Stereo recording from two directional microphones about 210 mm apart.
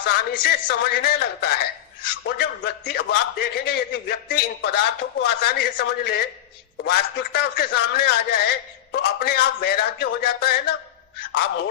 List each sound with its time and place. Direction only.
0.0 s a man's voice: 50° left (ahead or behind)